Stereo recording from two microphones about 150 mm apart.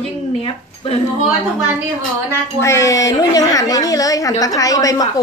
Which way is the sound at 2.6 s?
20° left (ahead or behind).